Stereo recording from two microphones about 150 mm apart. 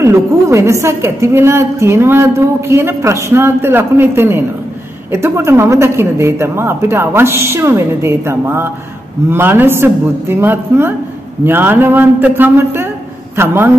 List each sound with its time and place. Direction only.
0.0 s a woman's voice: 20° right (ahead or behind)